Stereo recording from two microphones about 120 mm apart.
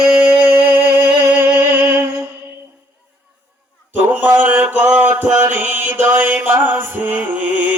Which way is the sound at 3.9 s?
15° right (ahead or behind).